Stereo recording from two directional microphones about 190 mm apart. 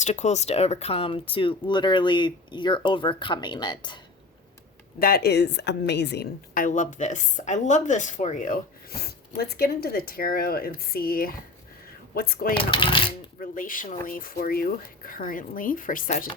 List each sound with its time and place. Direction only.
0.0 s speech: 35° left (ahead or behind)
4.9 s a woman's voice: 50° left (ahead or behind)
12.7 s speech: 25° left (ahead or behind)
13.4 s a woman's voice: 45° left (ahead or behind)